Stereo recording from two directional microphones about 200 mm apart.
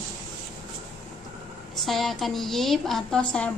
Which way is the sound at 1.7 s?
Centre (ahead or behind).